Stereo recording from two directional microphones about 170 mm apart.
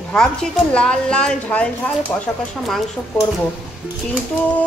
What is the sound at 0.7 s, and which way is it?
Speech, 5° left (ahead or behind).